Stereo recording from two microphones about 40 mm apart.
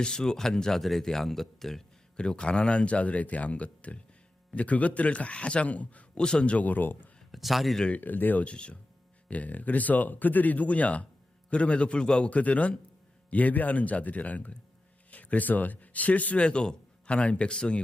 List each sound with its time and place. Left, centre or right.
0.0 s speech: centre
2.1 s speech: left
5.6 s speech: left
6.1 s speech: left
7.3 s a man's voice: centre
8.0 s speech: left
8.4 s speech: left
9.3 s speech: left
12.3 s a man's voice: left
16.4 s speech: left